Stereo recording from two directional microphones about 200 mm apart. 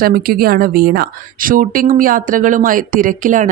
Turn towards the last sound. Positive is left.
turn(degrees=-40)  # may be behind; listen again after turning